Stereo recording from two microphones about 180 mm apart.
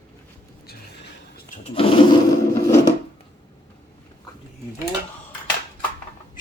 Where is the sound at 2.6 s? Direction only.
20° left (ahead or behind).